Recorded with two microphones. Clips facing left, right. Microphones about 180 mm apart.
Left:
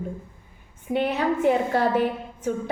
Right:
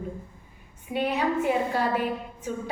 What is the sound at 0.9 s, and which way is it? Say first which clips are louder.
Speech: left 4 dB; 45° left (ahead or behind).